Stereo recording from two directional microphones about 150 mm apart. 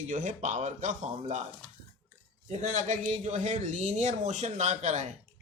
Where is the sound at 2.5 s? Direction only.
55° right (ahead or behind).